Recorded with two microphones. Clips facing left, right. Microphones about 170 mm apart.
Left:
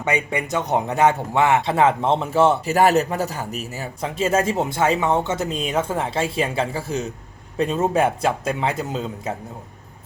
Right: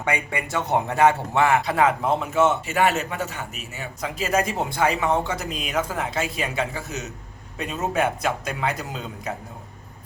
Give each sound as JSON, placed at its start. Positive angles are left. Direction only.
{"t": 0.0, "sound": "a man's voice", "side_deg": 20}